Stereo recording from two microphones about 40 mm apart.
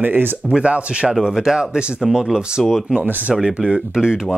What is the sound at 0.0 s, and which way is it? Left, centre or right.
Speech, right.